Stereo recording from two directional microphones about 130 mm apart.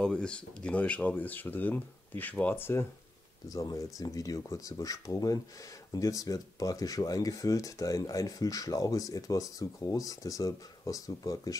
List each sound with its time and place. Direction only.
0.0 s speech: 5° left (ahead or behind); by 11.5 s 25° left (ahead or behind)